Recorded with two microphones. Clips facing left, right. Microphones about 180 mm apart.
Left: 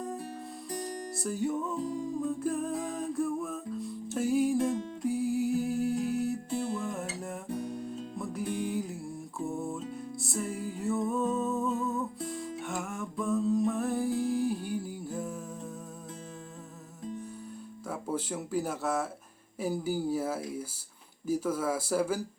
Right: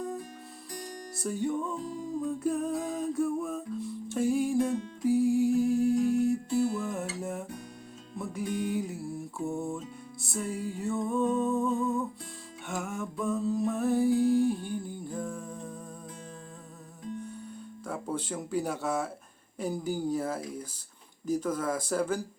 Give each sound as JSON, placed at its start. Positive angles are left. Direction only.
{"t": 1.2, "sound": "music", "side_deg": 0}
{"t": 17.8, "sound": "a sound", "side_deg": 5}
{"t": 19.5, "sound": "speech", "side_deg": 5}